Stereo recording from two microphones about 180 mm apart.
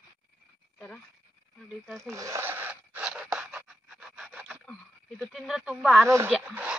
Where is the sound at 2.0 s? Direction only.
15° right (ahead or behind).